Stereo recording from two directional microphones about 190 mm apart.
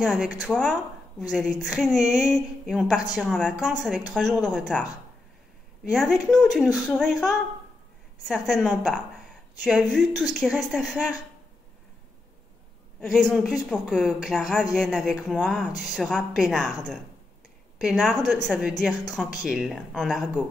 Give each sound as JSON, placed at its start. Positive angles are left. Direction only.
{"t": 0.0, "sound": "speech", "side_deg": 5}
{"t": 5.9, "sound": "speech", "side_deg": 0}
{"t": 13.0, "sound": "speech", "side_deg": 0}
{"t": 17.7, "sound": "a woman's voice", "side_deg": 0}